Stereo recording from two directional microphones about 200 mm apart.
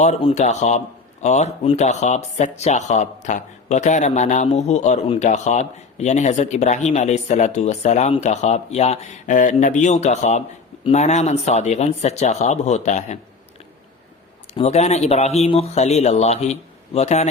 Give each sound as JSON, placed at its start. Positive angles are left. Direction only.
{"t": 0.0, "sound": "speech", "side_deg": 30}
{"t": 14.4, "sound": "speech", "side_deg": 30}